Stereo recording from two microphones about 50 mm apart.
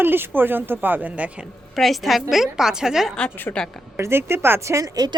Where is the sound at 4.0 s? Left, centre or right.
Right.